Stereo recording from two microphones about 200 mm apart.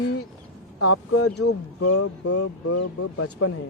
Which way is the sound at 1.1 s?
90° left.